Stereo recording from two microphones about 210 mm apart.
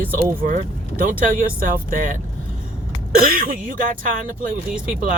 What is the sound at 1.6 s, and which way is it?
Speech, 40° right (ahead or behind).